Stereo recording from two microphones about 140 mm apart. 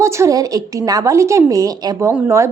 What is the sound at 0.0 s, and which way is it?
A woman's voice, 20° right (ahead or behind).